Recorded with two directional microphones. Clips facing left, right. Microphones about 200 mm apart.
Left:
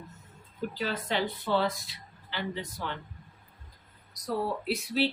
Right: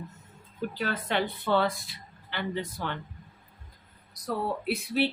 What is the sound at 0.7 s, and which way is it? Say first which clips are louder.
Speech: right 1 dB; 60° right (ahead or behind).